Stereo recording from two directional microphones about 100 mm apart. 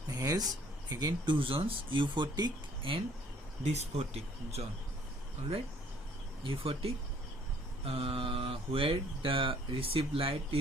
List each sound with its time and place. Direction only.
0.1 s speech: 35° right (ahead or behind)
3.6 s speech: 90° right
6.4 s speech: 65° right (ahead or behind)